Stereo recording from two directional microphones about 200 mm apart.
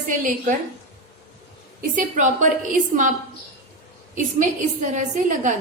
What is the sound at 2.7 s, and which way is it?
Speech, 40° right (ahead or behind).